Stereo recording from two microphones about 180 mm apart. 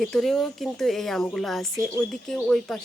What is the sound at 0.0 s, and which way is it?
Speech, centre (ahead or behind).